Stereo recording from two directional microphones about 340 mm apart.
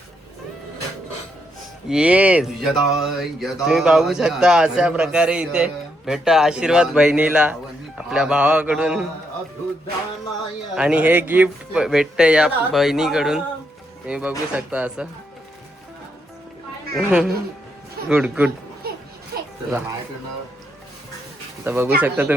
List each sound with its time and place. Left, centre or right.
1.9 s speech: centre
10.8 s speech: centre
16.9 s speech: centre
19.3 s children playing: right
21.6 s speech: centre